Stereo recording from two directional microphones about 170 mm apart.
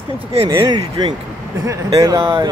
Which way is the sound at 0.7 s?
25° right (ahead or behind).